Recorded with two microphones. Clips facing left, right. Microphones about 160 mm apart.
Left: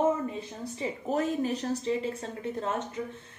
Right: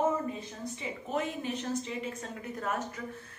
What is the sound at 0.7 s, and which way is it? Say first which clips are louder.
A woman's voice: left 5 dB; 35° left (ahead or behind).